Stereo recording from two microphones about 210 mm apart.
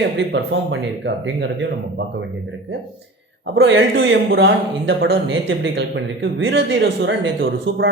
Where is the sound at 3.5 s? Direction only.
55° right (ahead or behind).